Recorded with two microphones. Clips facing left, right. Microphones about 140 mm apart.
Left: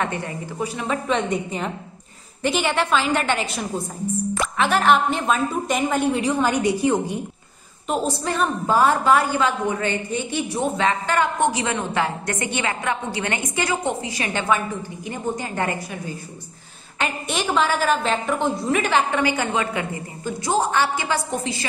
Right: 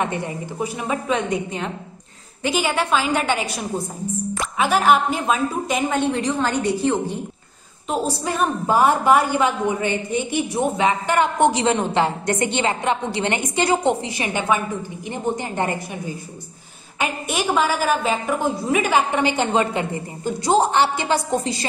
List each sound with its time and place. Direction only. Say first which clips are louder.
0.0 s a woman's voice: right 2 dB; 15° right (ahead or behind); by 7.2 s 15° left (ahead or behind)
8.2 s a woman's voice: right 1 dB; 15° right (ahead or behind)
17.0 s a woman's voice: right 1 dB; 10° right (ahead or behind)
19.2 s a woman's voice: right 3 dB; 25° right (ahead or behind)